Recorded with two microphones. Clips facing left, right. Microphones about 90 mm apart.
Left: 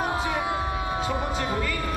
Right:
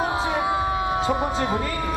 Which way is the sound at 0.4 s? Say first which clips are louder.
Right 5 dB; 5° right (ahead or behind).